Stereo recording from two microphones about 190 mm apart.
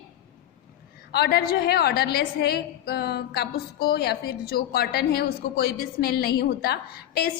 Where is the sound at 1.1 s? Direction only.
55° left (ahead or behind).